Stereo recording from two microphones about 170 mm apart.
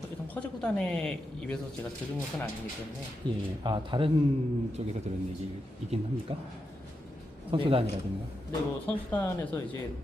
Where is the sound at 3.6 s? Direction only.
25° right (ahead or behind).